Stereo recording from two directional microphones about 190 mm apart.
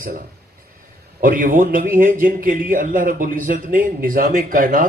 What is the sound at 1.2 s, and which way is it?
Speech, 45° right (ahead or behind).